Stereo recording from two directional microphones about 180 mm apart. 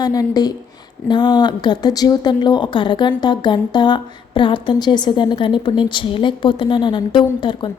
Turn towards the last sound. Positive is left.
turn(degrees=25)  # may be behind; listen again after turning